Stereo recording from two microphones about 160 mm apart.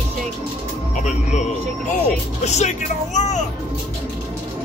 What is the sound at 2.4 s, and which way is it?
Speech, 45° left (ahead or behind).